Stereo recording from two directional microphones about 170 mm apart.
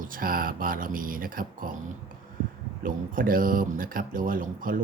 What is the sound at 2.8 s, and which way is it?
Speech, 55° right (ahead or behind).